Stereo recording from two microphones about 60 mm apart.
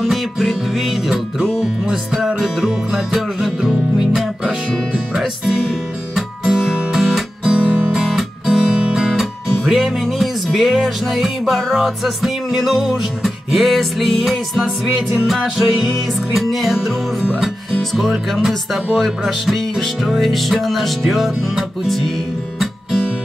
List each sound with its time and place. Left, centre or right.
0.0 s music: centre
7.6 s music: centre
7.9 s guitar: centre
10.0 s music: centre
18.3 s music: centre